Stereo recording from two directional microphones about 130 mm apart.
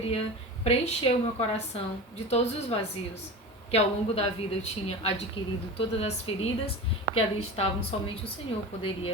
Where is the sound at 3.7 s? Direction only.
50° left (ahead or behind).